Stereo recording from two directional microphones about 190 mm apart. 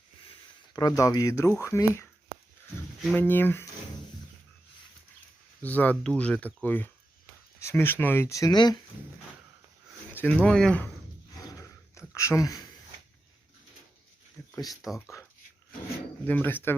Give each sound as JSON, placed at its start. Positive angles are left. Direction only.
{"t": 0.7, "sound": "speech", "side_deg": 20}
{"t": 5.6, "sound": "speech", "side_deg": 10}
{"t": 10.2, "sound": "speech", "side_deg": 5}
{"t": 11.4, "sound": "a sound", "side_deg": 15}
{"t": 14.4, "sound": "a sound", "side_deg": 15}
{"t": 14.8, "sound": "speech", "side_deg": 15}
{"t": 16.2, "sound": "speech", "side_deg": 10}